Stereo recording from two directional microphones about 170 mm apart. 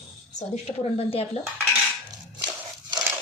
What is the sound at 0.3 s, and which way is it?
Speech, 35° left (ahead or behind).